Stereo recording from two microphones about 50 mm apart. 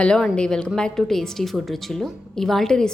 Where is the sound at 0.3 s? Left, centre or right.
Centre.